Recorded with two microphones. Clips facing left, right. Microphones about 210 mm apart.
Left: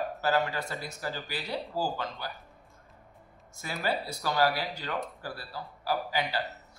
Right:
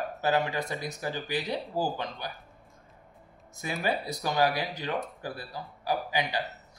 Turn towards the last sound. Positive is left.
turn(degrees=-15)  # may be behind; listen again after turning